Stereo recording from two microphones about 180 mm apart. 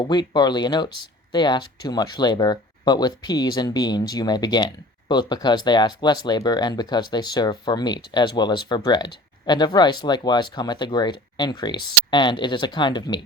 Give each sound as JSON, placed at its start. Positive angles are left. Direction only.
{"t": 0.1, "sound": "speech", "side_deg": 25}